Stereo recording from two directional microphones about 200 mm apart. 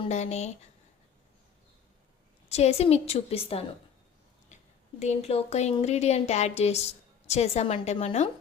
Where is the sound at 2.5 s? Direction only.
30° left (ahead or behind).